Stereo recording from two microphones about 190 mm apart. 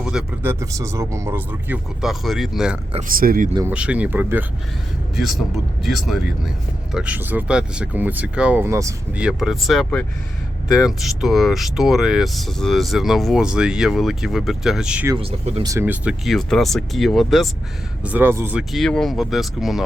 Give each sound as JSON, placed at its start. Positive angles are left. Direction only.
{"t": 0.0, "sound": "speech", "side_deg": -5}
{"t": 0.6, "sound": "speech", "side_deg": -15}
{"t": 3.1, "sound": "speech", "side_deg": -50}
{"t": 3.7, "sound": "speech", "side_deg": -5}
{"t": 9.2, "sound": "speech", "side_deg": 0}
{"t": 15.1, "sound": "speech", "side_deg": -30}
{"t": 15.6, "sound": "speech", "side_deg": -15}
{"t": 18.0, "sound": "speech", "side_deg": -10}
{"t": 18.7, "sound": "speech", "side_deg": 0}